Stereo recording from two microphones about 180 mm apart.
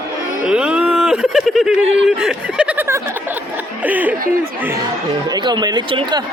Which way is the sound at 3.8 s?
10° right (ahead or behind).